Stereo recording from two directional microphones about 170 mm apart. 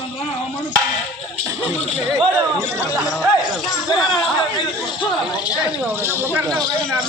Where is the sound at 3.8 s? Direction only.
25° left (ahead or behind).